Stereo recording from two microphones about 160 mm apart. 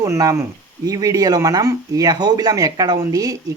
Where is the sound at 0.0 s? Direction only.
20° right (ahead or behind).